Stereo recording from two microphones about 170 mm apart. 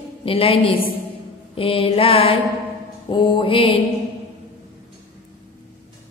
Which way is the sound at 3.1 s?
30° left (ahead or behind).